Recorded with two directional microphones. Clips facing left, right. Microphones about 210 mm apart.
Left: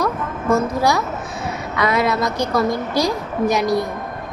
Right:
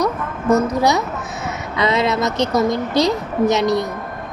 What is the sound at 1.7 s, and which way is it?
A woman's voice, 25° right (ahead or behind).